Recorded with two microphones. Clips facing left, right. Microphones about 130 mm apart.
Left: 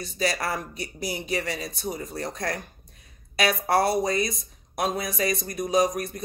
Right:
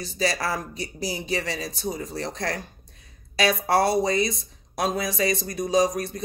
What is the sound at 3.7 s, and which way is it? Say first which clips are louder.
Speech: right 1 dB; 30° right (ahead or behind).